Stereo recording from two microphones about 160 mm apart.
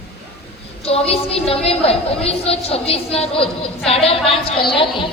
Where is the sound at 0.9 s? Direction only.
40° left (ahead or behind).